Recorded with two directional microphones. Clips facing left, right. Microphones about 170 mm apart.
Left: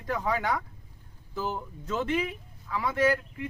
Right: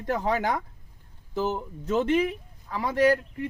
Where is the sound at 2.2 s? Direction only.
40° right (ahead or behind).